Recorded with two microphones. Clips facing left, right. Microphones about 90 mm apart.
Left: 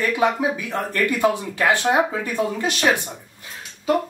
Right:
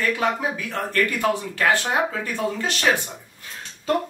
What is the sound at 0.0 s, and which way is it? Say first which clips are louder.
Speech: left 3 dB; 15° left (ahead or behind).